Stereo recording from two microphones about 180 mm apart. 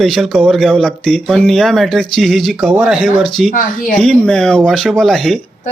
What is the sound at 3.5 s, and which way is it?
Speech, 50° left (ahead or behind).